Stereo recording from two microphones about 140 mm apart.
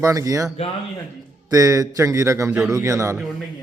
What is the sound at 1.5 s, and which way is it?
A man's voice, 25° right (ahead or behind).